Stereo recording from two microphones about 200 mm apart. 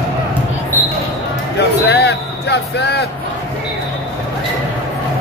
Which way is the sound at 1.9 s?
55° left (ahead or behind).